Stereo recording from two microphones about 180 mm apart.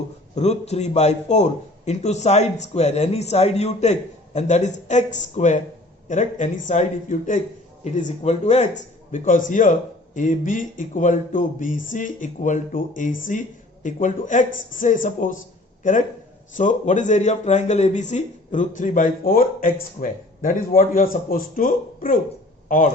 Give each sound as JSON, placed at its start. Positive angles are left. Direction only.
{"t": 0.3, "sound": "a man's voice", "side_deg": 35}